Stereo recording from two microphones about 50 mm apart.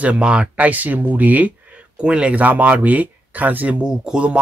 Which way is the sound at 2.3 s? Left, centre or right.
Right.